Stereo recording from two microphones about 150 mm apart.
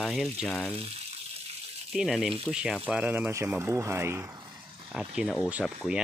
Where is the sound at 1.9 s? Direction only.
Centre (ahead or behind); by 4.3 s 15° right (ahead or behind).